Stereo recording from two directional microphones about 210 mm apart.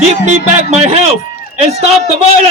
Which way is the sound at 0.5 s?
30° right (ahead or behind).